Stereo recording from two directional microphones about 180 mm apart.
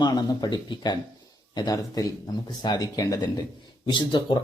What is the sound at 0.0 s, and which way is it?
A man's voice, 25° left (ahead or behind).